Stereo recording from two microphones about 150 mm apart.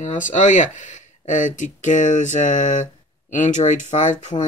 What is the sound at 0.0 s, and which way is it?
Speech, 55° left (ahead or behind).